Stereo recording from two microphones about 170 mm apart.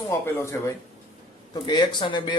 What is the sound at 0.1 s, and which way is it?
Speech, 15° left (ahead or behind).